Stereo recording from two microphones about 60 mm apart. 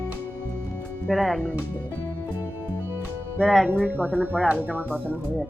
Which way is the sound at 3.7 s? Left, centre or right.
Right.